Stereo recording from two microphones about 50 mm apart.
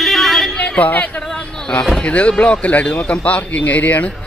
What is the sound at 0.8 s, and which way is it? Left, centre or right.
Speech, left.